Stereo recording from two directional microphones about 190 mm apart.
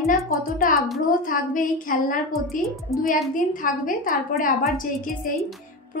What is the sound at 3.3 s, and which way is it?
A woman's voice, 45° left (ahead or behind).